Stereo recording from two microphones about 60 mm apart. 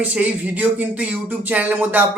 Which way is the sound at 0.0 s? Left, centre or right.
Right.